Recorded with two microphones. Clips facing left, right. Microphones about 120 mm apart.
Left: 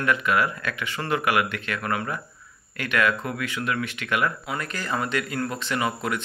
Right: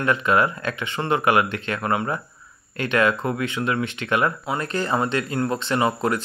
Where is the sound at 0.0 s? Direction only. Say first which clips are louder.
Right 3 dB; 30° right (ahead or behind).